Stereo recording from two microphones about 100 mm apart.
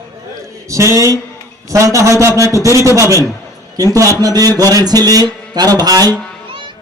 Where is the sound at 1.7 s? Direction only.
35° right (ahead or behind).